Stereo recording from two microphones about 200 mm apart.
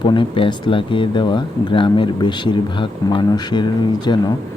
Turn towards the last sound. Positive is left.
turn(degrees=20)  # may be behind; listen again after turning